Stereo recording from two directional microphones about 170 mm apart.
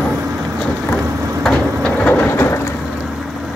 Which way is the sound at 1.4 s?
5° left (ahead or behind).